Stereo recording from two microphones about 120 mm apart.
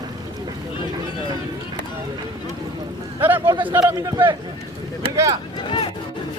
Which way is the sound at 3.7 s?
30° right (ahead or behind).